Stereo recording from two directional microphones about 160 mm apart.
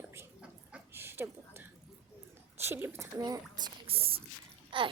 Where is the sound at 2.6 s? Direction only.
15° right (ahead or behind).